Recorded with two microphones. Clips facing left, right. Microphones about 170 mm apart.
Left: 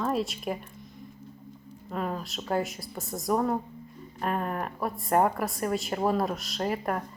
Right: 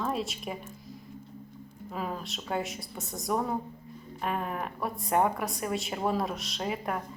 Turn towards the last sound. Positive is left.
turn(degrees=0)  # may be behind; listen again after turning